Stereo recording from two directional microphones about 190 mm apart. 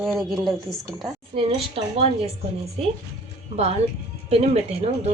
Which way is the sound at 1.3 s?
30° right (ahead or behind).